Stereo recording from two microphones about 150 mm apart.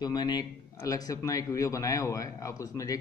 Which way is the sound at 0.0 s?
25° left (ahead or behind).